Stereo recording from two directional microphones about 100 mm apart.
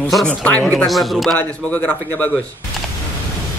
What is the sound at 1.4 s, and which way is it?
A man's voice, 15° left (ahead or behind).